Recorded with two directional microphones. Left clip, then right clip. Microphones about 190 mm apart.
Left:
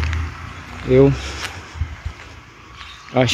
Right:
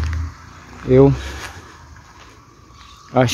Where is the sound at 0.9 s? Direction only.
15° right (ahead or behind).